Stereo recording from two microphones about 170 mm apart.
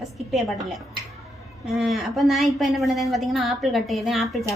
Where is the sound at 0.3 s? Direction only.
Centre (ahead or behind).